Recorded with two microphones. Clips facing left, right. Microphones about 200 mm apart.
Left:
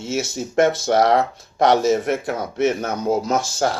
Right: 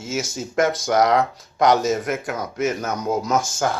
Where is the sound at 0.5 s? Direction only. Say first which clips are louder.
Left 2 dB; 30° left (ahead or behind).